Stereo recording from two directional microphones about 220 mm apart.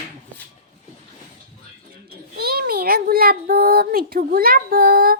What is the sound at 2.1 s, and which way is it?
Child singing, 45° right (ahead or behind).